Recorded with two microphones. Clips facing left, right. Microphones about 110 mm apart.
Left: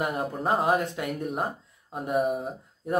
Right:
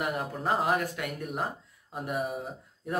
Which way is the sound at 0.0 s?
30° left (ahead or behind).